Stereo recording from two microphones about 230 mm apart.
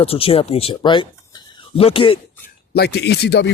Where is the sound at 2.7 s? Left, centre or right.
Left.